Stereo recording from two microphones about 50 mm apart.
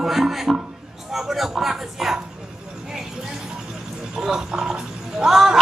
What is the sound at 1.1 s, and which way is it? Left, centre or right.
Speech, centre.